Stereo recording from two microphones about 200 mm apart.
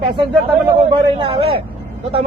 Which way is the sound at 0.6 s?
25° right (ahead or behind).